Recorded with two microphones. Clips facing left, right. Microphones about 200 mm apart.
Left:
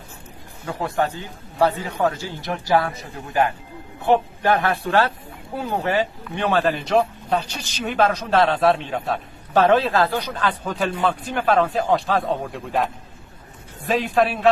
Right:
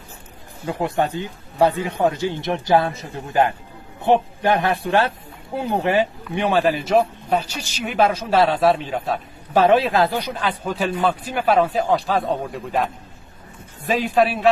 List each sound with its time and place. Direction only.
0.7 s a man's voice: 15° right (ahead or behind); by 14.5 s centre (ahead or behind)